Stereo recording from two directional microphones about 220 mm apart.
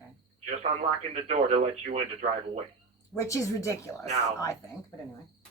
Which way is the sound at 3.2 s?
15° left (ahead or behind).